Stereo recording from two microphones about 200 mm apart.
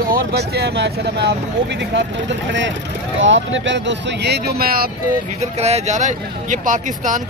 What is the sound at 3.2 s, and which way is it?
Speech, 70° right (ahead or behind).